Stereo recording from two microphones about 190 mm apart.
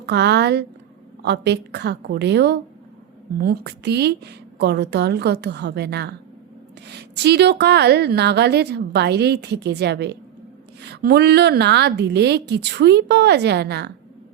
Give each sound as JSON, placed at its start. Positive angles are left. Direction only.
{"t": 0.0, "sound": "a woman's voice", "side_deg": -60}